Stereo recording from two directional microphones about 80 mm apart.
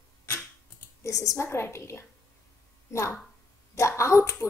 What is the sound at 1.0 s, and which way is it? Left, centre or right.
A child's voice, left.